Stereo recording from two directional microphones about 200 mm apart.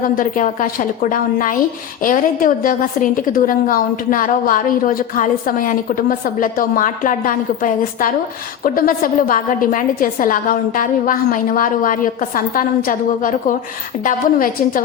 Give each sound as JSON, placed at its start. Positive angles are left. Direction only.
{"t": 0.0, "sound": "a woman's voice", "side_deg": 45}